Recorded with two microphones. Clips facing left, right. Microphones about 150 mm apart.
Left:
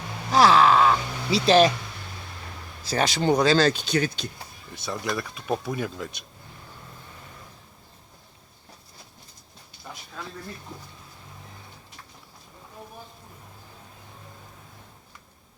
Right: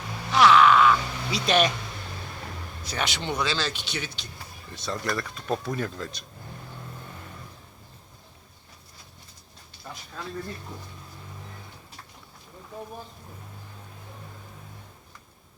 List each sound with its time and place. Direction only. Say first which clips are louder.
0.3 s speech: even; 35° left (ahead or behind)
2.8 s speech: left 8 dB; 35° left (ahead or behind)
4.7 s speech: even; 10° left (ahead or behind)